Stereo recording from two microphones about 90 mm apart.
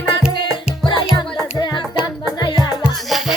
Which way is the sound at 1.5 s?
60° left (ahead or behind).